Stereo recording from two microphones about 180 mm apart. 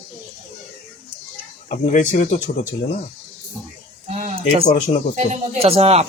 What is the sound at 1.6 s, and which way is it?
Speech, 45° left (ahead or behind).